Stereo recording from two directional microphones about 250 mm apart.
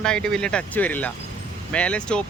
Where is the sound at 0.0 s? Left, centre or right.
Centre.